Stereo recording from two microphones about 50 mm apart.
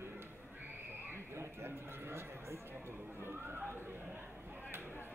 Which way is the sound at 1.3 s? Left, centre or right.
Right.